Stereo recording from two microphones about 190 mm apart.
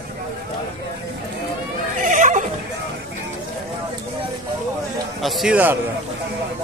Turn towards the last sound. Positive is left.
turn(degrees=-5)  # may be behind; listen again after turning